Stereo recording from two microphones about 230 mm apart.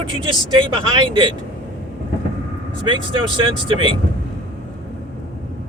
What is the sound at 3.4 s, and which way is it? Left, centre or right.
Speech, right.